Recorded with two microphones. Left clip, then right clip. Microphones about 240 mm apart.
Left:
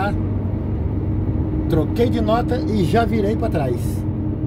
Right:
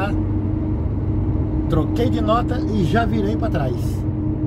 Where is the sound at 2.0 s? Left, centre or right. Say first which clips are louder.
Left 1 dB; centre.